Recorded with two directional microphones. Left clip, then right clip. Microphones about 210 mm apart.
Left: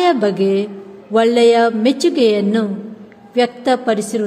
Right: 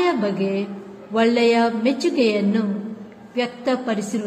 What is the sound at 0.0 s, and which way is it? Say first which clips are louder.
A woman's voice: left 7 dB; 55° left (ahead or behind).